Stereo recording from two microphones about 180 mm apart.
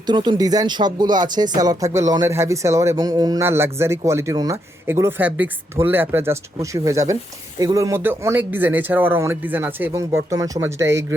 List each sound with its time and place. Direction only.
0.1 s speech: 25° right (ahead or behind)